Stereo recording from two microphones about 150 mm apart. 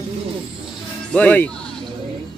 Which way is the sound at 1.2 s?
10° left (ahead or behind).